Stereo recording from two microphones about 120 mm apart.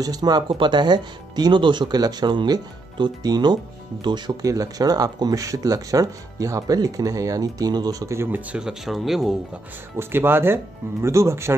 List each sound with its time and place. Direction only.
0.0 s speech: 35° right (ahead or behind); by 9.3 s centre (ahead or behind)
9.9 s speech: 20° right (ahead or behind)